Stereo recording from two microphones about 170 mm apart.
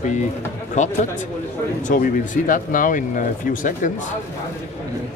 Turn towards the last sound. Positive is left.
turn(degrees=50)  # may be behind; listen again after turning